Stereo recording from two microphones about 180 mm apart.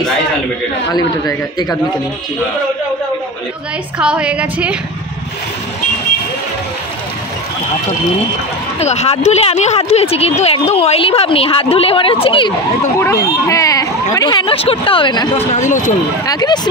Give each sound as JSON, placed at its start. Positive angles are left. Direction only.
{"t": 0.9, "sound": "speech", "side_deg": 20}
{"t": 4.0, "sound": "a woman's voice", "side_deg": -5}
{"t": 8.7, "sound": "speech", "side_deg": 35}
{"t": 13.0, "sound": "speech", "side_deg": 15}
{"t": 15.5, "sound": "speech", "side_deg": 45}
{"t": 16.3, "sound": "speech", "side_deg": 20}